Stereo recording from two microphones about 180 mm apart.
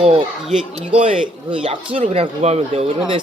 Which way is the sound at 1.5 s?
30° right (ahead or behind).